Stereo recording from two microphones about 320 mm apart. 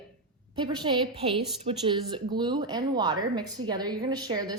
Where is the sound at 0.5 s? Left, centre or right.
Centre.